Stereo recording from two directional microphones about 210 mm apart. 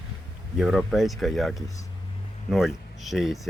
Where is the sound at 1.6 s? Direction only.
15° left (ahead or behind).